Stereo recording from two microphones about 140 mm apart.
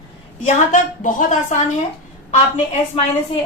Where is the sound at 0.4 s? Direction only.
65° left (ahead or behind).